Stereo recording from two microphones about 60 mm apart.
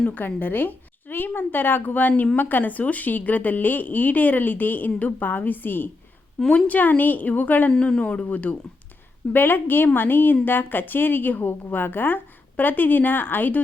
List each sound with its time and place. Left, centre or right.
0.1 s a woman's voice: left
7.7 s a woman's voice: centre; by 13.6 s left